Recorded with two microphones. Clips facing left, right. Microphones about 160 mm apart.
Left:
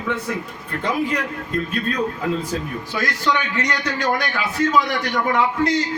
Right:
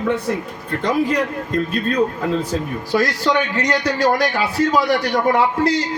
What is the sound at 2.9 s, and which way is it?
A man's voice, 35° right (ahead or behind).